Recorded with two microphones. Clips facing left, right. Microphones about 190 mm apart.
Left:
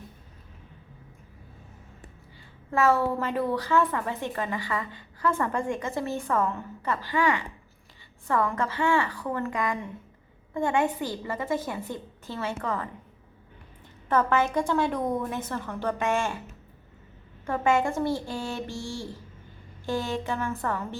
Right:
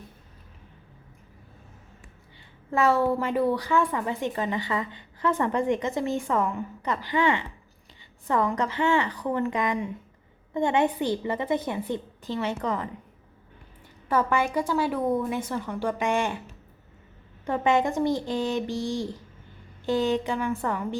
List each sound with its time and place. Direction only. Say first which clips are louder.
2.7 s a woman's voice: right 1 dB; 15° right (ahead or behind)
14.1 s a woman's voice: even; 10° right (ahead or behind)
17.4 s a woman's voice: right 1 dB; 20° right (ahead or behind)